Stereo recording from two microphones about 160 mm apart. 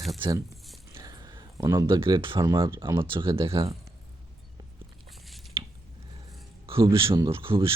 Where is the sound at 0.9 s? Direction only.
25° right (ahead or behind).